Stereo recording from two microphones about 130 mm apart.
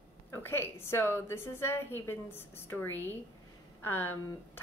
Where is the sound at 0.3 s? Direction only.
20° left (ahead or behind).